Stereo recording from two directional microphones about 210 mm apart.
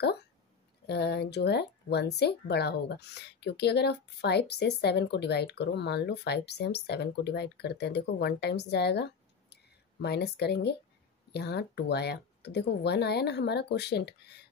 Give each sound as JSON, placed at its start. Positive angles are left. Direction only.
{"t": 0.8, "sound": "speech", "side_deg": 50}